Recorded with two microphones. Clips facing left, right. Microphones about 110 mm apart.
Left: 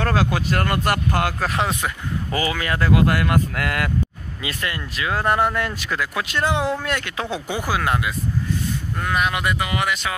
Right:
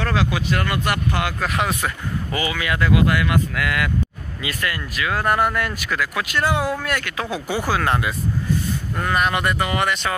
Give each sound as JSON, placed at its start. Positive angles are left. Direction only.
{"t": 0.0, "sound": "speech", "side_deg": 40}
{"t": 4.4, "sound": "speech", "side_deg": 25}